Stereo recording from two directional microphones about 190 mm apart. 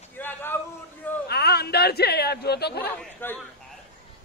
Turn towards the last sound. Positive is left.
turn(degrees=10)  # may be behind; listen again after turning